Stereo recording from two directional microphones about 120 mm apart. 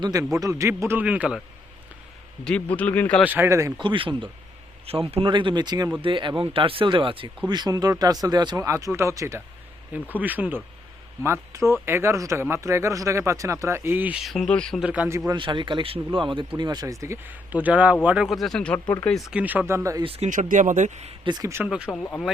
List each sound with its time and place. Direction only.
0.0 s speech: 30° right (ahead or behind); by 1.4 s 10° right (ahead or behind)
2.4 s a man's voice: 10° left (ahead or behind)
3.2 s speech: 15° right (ahead or behind)
3.8 s speech: 45° right (ahead or behind); by 14.2 s 15° right (ahead or behind)
14.2 s speech: centre (ahead or behind)
14.8 s speech: 10° right (ahead or behind)
15.4 s speech: 45° right (ahead or behind); by 18.9 s 10° left (ahead or behind)
19.3 s speech: 10° right (ahead or behind)
20.0 s speech: 50° right (ahead or behind)
20.2 s speech: 85° right; by 21.2 s 65° right (ahead or behind)
21.2 s speech: 35° right (ahead or behind)
21.6 s speech: 10° right (ahead or behind)